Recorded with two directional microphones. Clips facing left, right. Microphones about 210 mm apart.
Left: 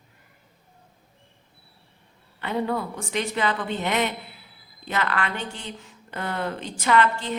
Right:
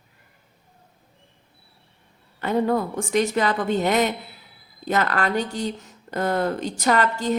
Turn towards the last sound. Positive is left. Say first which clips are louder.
# right 1 dB
turn(degrees=-40)  # may be behind; listen again after turning